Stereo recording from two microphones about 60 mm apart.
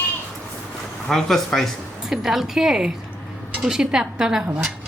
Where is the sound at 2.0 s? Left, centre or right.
Centre.